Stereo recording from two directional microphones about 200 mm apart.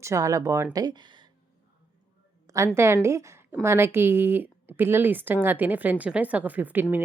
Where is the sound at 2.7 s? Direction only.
15° right (ahead or behind).